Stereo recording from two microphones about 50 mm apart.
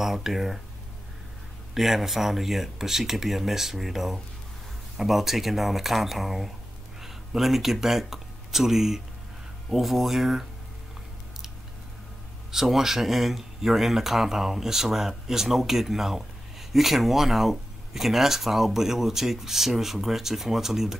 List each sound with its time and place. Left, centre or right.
0.0 s speech: centre
1.7 s speech: centre
12.4 s speech: centre